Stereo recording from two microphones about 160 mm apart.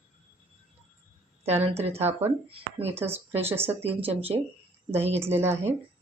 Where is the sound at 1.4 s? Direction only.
40° right (ahead or behind).